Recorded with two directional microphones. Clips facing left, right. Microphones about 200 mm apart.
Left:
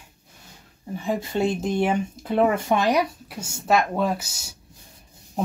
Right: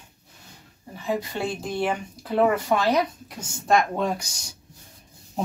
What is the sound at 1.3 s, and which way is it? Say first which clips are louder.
Speech: left 5 dB; 20° left (ahead or behind).